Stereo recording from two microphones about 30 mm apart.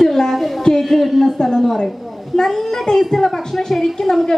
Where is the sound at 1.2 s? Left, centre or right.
Centre.